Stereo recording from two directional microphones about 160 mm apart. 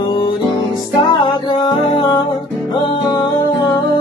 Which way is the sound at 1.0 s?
30° left (ahead or behind).